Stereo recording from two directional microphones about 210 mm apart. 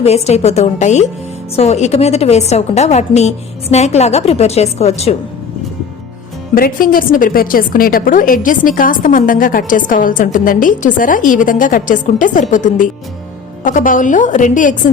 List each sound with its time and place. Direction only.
0.0 s a woman's voice: 30° left (ahead or behind)
6.5 s a woman's voice: 40° left (ahead or behind)